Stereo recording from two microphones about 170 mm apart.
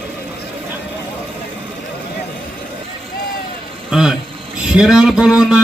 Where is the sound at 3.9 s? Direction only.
5° right (ahead or behind).